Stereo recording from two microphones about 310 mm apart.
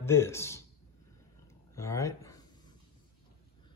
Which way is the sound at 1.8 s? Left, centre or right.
Centre.